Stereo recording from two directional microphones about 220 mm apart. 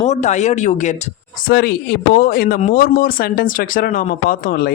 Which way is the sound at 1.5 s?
45° left (ahead or behind).